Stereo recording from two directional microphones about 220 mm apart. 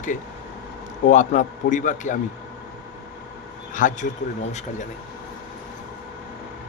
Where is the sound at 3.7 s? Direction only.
35° left (ahead or behind).